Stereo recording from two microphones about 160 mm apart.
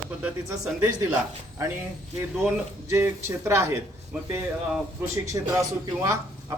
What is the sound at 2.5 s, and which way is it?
Speech, 15° right (ahead or behind).